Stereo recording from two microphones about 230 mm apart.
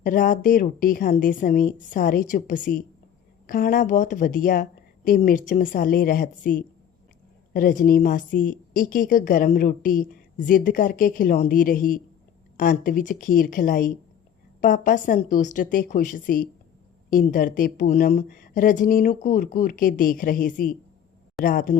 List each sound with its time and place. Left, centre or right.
0.0 s a woman's voice: left